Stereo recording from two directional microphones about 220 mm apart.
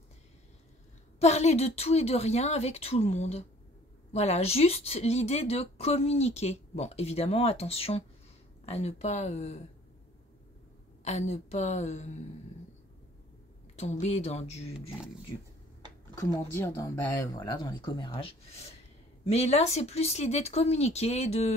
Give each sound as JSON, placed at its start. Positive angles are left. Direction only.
{"t": 1.2, "sound": "a woman's voice", "side_deg": 30}
{"t": 11.1, "sound": "a woman's voice", "side_deg": 30}
{"t": 13.7, "sound": "a woman's voice", "side_deg": 30}
{"t": 16.2, "sound": "a woman's voice", "side_deg": 15}